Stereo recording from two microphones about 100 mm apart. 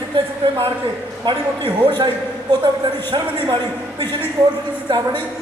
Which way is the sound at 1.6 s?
50° right (ahead or behind).